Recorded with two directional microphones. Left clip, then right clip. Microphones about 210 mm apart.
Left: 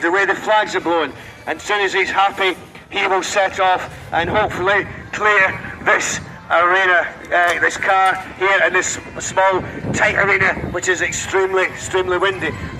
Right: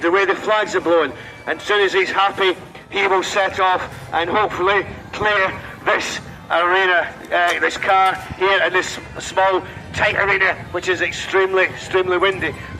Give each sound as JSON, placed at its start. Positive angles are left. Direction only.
{"t": 0.0, "sound": "a man's voice", "side_deg": 35}